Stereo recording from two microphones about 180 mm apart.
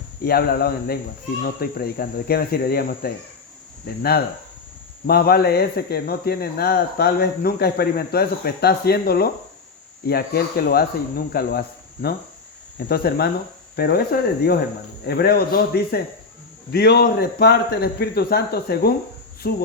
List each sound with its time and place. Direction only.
0.3 s speech: 60° left (ahead or behind)
5.0 s speech: 60° left (ahead or behind)
12.9 s speech: 60° left (ahead or behind)